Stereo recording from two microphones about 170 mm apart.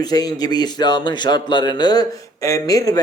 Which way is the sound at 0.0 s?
20° left (ahead or behind).